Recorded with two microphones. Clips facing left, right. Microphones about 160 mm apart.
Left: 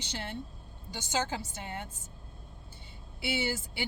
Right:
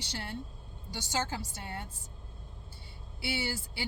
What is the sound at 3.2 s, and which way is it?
Speech, 20° left (ahead or behind).